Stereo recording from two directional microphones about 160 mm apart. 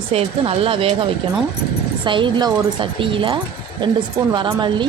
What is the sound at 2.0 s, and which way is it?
A woman's voice, 30° right (ahead or behind).